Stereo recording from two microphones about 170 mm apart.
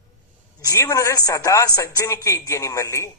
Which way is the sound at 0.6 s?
20° left (ahead or behind).